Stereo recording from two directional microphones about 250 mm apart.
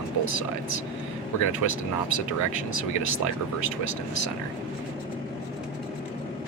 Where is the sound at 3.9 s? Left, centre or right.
Left.